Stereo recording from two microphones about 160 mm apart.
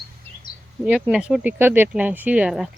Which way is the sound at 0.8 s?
5° right (ahead or behind).